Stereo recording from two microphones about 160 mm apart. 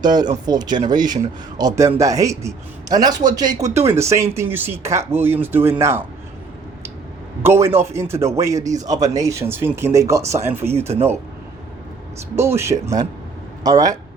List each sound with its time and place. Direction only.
0.0 s a man's voice: 25° right (ahead or behind)
7.4 s a man's voice: 15° right (ahead or behind)
12.4 s a man's voice: 15° right (ahead or behind)